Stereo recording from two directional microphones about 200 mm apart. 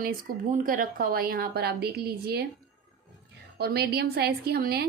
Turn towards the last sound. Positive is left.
turn(degrees=-50)  # may be behind; listen again after turning